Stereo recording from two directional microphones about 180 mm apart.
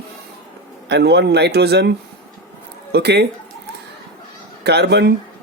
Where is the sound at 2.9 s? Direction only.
65° right (ahead or behind).